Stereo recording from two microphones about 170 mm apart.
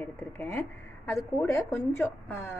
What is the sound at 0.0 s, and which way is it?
A woman's voice, 15° left (ahead or behind).